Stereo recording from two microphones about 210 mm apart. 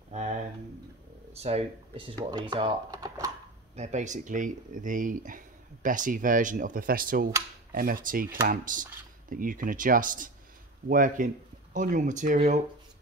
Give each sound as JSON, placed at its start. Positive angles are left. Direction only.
{"t": 1.3, "sound": "speech", "side_deg": -30}
{"t": 3.7, "sound": "speech", "side_deg": -35}